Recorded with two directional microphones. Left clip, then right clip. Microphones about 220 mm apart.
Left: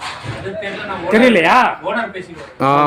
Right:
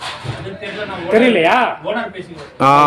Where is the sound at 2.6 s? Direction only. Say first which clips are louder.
Right 3 dB; 10° right (ahead or behind).